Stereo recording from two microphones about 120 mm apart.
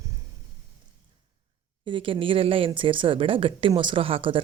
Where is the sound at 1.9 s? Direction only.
45° right (ahead or behind).